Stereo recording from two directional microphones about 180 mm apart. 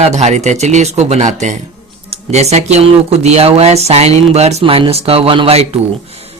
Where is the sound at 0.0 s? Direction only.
35° right (ahead or behind).